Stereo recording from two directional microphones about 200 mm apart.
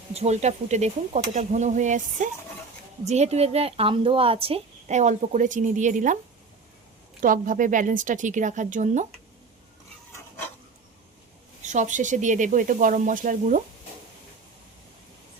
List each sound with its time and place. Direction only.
0.1 s speech: 30° right (ahead or behind)
7.2 s speech: 45° right (ahead or behind)
11.6 s speech: 35° right (ahead or behind)